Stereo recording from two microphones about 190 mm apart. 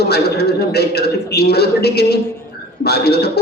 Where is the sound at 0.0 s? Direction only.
60° left (ahead or behind).